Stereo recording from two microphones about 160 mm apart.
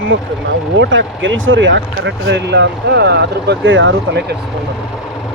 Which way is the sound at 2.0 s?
90° right.